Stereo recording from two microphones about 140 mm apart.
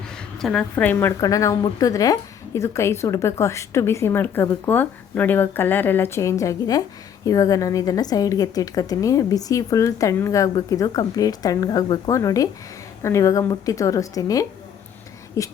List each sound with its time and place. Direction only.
0.1 s a woman's voice: 5° left (ahead or behind)
1.2 s a woman's voice: 25° left (ahead or behind)